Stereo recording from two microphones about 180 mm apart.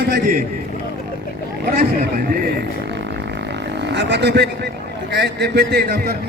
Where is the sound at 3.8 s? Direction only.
70° right (ahead or behind).